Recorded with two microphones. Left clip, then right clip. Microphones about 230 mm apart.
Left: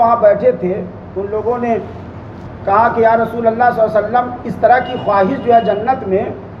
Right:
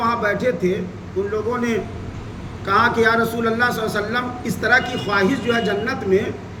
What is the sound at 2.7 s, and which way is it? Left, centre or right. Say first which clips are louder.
A woman's voice: left 5 dB; centre.